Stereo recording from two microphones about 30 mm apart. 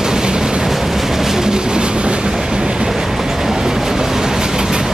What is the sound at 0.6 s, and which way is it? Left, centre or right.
Train, centre.